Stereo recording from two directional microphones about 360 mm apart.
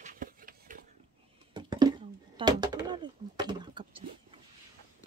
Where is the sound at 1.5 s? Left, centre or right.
Centre.